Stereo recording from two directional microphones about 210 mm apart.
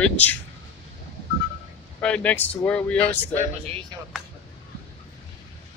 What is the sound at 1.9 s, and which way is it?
Speech, 5° left (ahead or behind).